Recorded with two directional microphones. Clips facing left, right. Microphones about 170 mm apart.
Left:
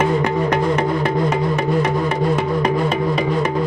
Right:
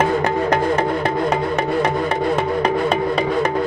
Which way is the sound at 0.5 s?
30° right (ahead or behind).